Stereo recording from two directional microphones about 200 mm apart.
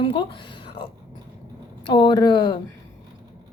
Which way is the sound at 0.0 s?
25° left (ahead or behind).